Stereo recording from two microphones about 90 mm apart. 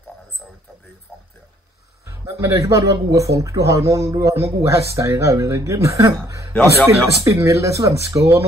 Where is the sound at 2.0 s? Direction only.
35° right (ahead or behind).